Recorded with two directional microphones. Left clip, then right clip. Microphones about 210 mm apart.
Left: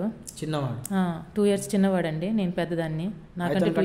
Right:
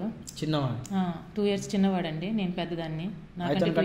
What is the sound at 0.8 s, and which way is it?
A woman's voice, 50° left (ahead or behind).